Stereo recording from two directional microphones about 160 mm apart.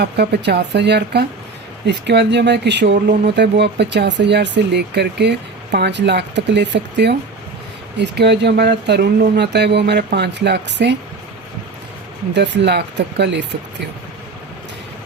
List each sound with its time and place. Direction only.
0.0 s speech: 90° right
12.3 s speech: 90° right